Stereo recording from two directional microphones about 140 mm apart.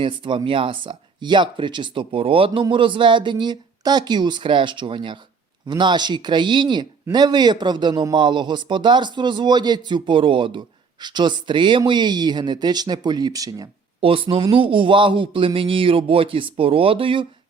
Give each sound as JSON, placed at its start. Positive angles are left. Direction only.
{"t": 0.0, "sound": "speech", "side_deg": -35}
{"t": 14.0, "sound": "speech", "side_deg": -40}